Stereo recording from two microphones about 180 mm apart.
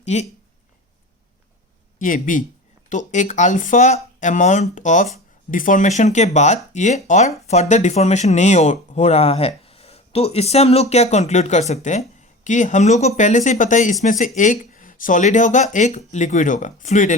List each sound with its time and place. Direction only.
0.0 s speech: 40° left (ahead or behind)
2.0 s speech: 50° left (ahead or behind)